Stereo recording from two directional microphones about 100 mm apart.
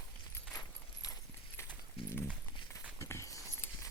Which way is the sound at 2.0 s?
75° left (ahead or behind).